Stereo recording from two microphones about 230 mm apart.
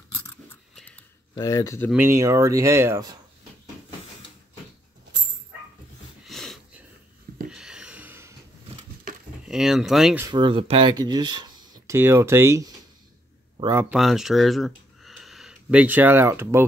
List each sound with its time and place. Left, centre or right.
0.2 s a sound: centre
1.3 s speech: centre
1.9 s speech: centre
6.2 s wheeze: centre
7.4 s a sound: centre
9.1 s a sound: right
9.5 s speech: centre
10.2 s speech: right
13.8 s speech: centre